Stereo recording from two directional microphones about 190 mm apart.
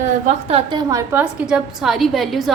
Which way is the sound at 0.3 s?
30° right (ahead or behind).